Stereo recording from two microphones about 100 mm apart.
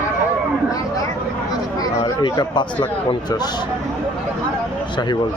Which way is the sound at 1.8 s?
40° left (ahead or behind).